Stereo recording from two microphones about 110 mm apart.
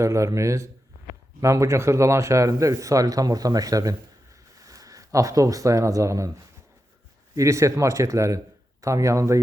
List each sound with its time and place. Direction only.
0.0 s a man's voice: 25° right (ahead or behind)